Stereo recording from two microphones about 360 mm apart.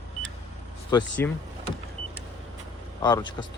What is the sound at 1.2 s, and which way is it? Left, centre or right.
Speech, centre.